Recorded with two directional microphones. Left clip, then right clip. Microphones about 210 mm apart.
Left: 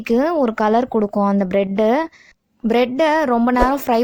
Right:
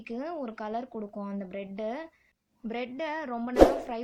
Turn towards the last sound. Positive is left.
turn(degrees=45)  # may be behind; listen again after turning